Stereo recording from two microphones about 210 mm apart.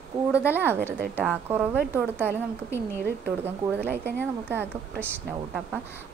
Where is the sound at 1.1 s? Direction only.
10° right (ahead or behind).